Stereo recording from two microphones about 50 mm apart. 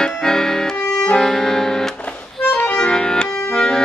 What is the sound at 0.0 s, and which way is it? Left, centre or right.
Music, centre.